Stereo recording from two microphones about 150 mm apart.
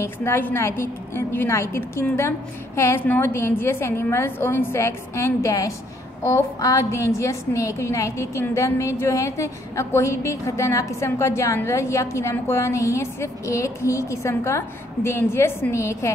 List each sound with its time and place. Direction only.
0.0 s a woman's voice: 15° left (ahead or behind)